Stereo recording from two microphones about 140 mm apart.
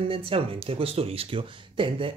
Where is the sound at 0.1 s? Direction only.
40° right (ahead or behind).